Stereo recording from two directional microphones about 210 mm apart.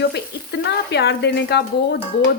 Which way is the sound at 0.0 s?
50° left (ahead or behind).